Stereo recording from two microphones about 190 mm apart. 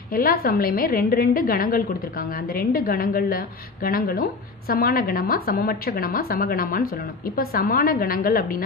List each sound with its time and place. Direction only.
0.1 s a woman's voice: 50° left (ahead or behind)